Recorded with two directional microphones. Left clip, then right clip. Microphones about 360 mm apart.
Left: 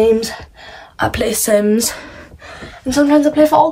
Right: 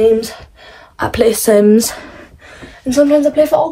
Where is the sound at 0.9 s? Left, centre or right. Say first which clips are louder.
Right 4 dB; centre.